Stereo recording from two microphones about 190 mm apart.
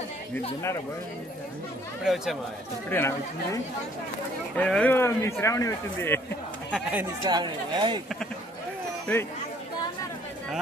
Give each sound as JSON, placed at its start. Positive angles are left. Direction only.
{"t": 2.9, "sound": "speech", "side_deg": 15}
{"t": 6.7, "sound": "speech", "side_deg": -10}
{"t": 7.2, "sound": "speech", "side_deg": -20}